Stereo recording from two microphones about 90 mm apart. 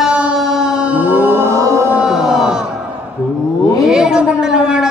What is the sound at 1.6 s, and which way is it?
Music, 30° right (ahead or behind).